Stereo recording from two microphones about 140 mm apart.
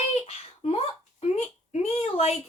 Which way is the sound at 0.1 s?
50° left (ahead or behind).